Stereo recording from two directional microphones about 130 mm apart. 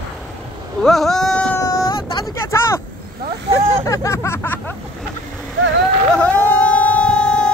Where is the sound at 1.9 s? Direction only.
40° left (ahead or behind).